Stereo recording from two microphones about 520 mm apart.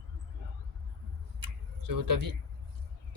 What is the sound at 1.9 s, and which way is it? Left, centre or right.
Speech, right.